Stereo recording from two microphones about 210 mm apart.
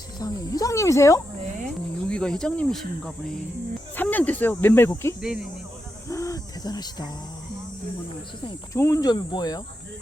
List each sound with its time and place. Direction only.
0.2 s speech: 20° left (ahead or behind)
5.2 s speech: 5° right (ahead or behind)
6.1 s hoot: 15° left (ahead or behind)
8.4 s cricket: 15° left (ahead or behind)